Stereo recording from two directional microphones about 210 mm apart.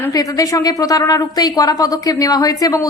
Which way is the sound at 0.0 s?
15° left (ahead or behind).